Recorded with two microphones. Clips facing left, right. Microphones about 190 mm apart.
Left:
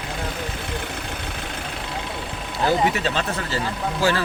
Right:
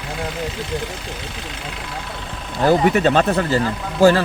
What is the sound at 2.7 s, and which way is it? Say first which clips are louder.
Speech: right 7 dB; 50° right (ahead or behind).